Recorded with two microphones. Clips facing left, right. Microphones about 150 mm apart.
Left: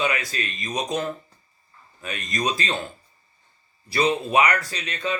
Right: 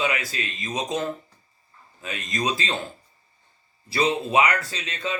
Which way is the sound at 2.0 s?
25° right (ahead or behind).